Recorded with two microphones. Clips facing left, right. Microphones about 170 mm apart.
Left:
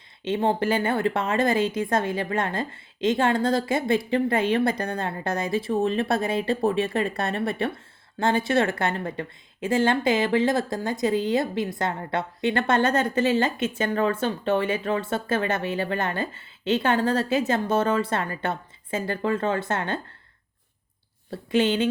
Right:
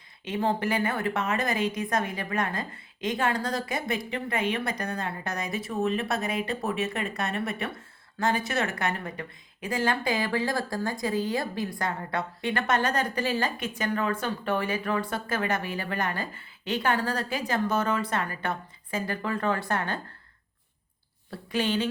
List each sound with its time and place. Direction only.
0.3 s a woman's voice: 30° left (ahead or behind)
21.2 s a woman's voice: 25° left (ahead or behind)